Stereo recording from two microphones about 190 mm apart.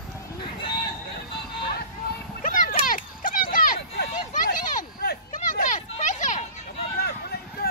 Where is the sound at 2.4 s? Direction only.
45° left (ahead or behind).